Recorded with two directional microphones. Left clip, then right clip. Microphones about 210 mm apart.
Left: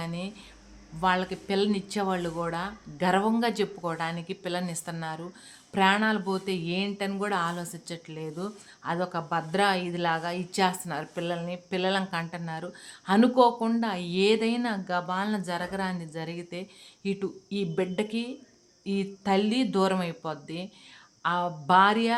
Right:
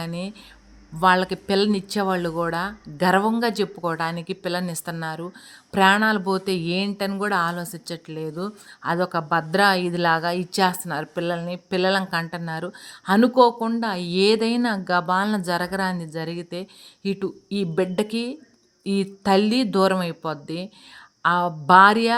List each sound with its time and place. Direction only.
0.0 s speech: 30° right (ahead or behind)